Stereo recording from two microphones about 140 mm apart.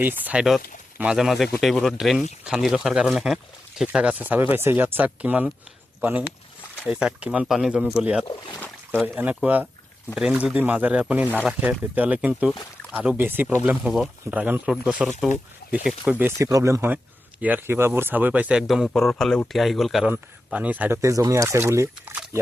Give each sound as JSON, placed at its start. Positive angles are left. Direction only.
{"t": 0.0, "sound": "speech", "side_deg": -10}
{"t": 8.3, "sound": "speech", "side_deg": 30}
{"t": 9.0, "sound": "speech", "side_deg": -10}
{"t": 16.4, "sound": "speech", "side_deg": -25}
{"t": 21.0, "sound": "speech", "side_deg": -25}